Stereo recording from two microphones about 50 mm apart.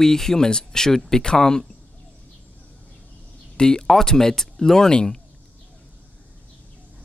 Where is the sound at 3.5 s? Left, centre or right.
Centre.